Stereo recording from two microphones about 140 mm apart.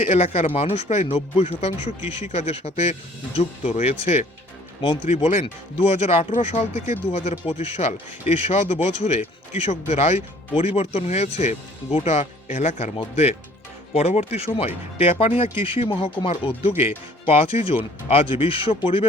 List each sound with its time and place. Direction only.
0.1 s speech: 45° left (ahead or behind)
12.5 s speech: 70° left (ahead or behind)
13.9 s speech: 50° left (ahead or behind)